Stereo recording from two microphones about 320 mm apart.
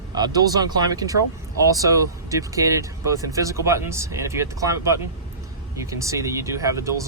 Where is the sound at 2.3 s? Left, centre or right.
Centre.